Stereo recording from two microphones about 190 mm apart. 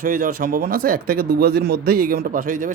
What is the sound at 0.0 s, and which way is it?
Speech, 50° right (ahead or behind).